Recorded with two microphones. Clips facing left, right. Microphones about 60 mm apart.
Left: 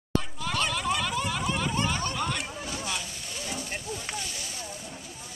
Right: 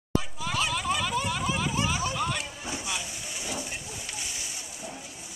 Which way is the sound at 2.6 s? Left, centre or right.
Centre.